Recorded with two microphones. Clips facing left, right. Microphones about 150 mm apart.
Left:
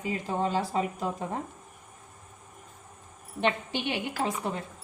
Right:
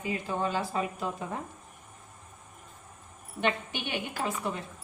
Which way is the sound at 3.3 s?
30° left (ahead or behind).